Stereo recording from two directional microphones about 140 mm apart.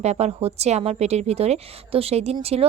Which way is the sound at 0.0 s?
50° right (ahead or behind).